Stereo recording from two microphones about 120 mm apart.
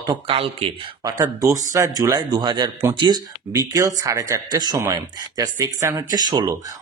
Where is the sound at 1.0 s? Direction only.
30° right (ahead or behind).